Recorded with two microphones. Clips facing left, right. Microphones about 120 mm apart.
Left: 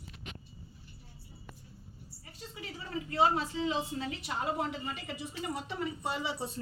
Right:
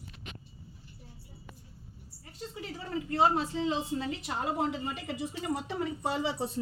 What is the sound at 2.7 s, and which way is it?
A woman's voice, 35° right (ahead or behind).